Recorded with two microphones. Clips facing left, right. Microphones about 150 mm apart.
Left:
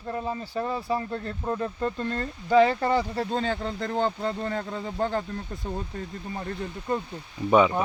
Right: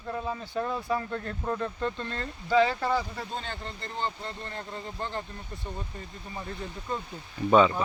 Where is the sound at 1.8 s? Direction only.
40° left (ahead or behind).